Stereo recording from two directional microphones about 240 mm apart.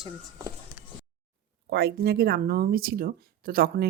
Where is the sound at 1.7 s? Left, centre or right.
Right.